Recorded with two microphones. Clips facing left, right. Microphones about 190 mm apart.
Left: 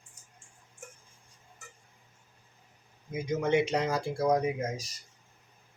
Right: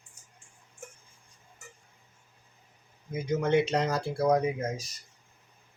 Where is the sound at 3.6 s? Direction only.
10° left (ahead or behind).